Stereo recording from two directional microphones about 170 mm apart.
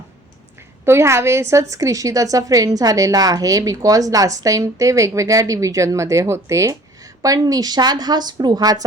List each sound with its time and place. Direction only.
0.9 s a woman's voice: 15° right (ahead or behind)